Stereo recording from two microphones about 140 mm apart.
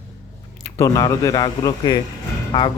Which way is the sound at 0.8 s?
25° left (ahead or behind).